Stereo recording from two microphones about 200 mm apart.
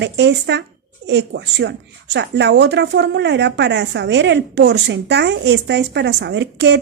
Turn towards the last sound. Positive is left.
turn(degrees=-60)  # may be behind; listen again after turning